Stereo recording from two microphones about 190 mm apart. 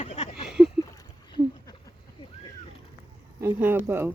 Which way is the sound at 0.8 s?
20° left (ahead or behind).